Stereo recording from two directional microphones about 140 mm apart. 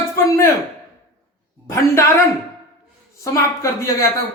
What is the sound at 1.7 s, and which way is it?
Speech, 20° left (ahead or behind).